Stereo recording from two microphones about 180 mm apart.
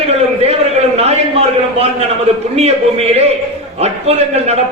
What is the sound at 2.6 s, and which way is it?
A man's voice, 35° right (ahead or behind).